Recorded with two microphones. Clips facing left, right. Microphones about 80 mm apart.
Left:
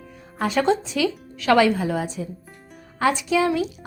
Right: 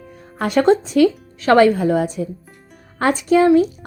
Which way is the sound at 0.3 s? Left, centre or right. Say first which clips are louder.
Right 6 dB; right.